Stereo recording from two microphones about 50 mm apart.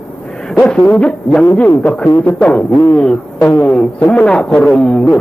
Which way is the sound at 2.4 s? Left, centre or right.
Left.